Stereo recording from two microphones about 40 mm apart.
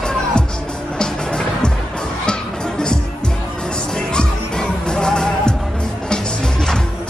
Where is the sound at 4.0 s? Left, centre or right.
Left.